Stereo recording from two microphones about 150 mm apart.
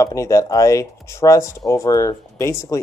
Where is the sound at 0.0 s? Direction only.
20° left (ahead or behind).